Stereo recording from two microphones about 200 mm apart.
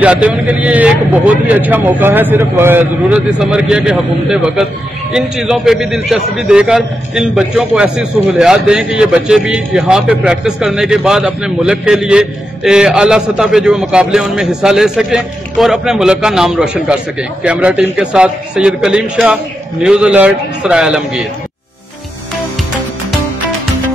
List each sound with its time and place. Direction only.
0.0 s a man's voice: 5° right (ahead or behind)